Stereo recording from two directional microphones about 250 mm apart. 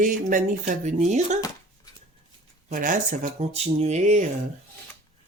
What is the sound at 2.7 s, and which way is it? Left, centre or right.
Speech, right.